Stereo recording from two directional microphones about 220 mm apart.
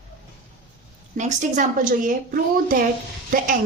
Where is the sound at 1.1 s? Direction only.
35° right (ahead or behind).